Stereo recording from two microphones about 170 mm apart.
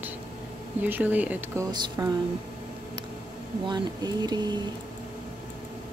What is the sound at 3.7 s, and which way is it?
Speech, 25° right (ahead or behind).